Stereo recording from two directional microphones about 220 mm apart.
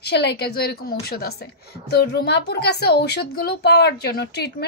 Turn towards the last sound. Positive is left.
turn(degrees=50)  # may be behind; listen again after turning